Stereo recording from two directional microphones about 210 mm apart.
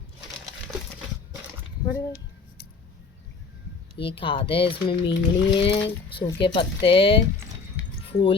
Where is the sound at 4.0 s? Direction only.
25° left (ahead or behind).